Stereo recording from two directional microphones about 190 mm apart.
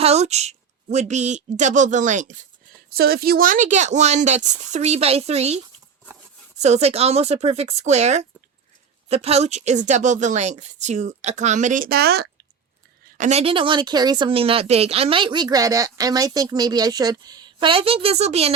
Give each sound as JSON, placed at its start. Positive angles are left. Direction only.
{"t": 0.0, "sound": "a woman's voice", "side_deg": -35}
{"t": 2.9, "sound": "speech", "side_deg": -55}
{"t": 6.6, "sound": "speech", "side_deg": -35}
{"t": 13.1, "sound": "speech", "side_deg": -35}